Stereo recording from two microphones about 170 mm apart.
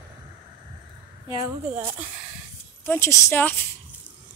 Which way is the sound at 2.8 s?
15° left (ahead or behind).